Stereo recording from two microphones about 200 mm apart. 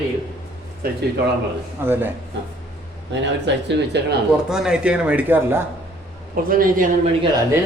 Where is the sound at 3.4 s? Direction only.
60° right (ahead or behind).